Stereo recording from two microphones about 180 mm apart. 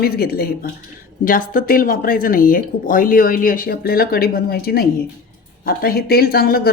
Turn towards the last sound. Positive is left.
turn(degrees=60)  # may be behind; listen again after turning